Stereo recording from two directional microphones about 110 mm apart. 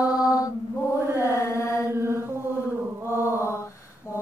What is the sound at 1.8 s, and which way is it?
Chant, 25° right (ahead or behind).